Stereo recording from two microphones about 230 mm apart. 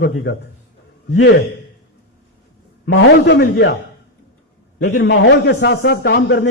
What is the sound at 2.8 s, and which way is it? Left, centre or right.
Speech, left.